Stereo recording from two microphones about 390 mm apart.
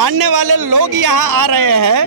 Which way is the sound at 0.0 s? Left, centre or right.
Right.